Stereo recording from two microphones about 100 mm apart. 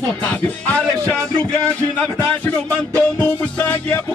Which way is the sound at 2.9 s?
15° left (ahead or behind).